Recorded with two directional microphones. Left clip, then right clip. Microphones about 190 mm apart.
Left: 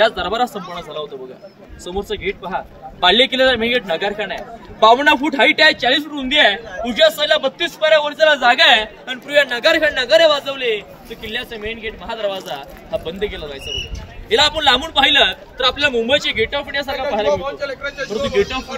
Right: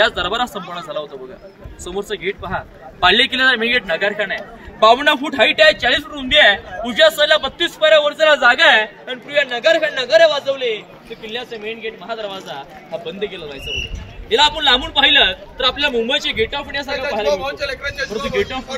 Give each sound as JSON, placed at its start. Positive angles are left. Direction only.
{"t": 0.0, "sound": "a man's voice", "side_deg": -5}
{"t": 8.5, "sound": "a man's voice", "side_deg": 30}
{"t": 9.0, "sound": "a man's voice", "side_deg": 65}
{"t": 17.3, "sound": "a man's voice", "side_deg": -45}
{"t": 18.1, "sound": "speech", "side_deg": 65}